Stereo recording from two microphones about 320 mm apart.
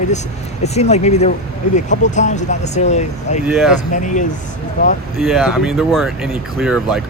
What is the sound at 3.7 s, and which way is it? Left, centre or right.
Speech, left.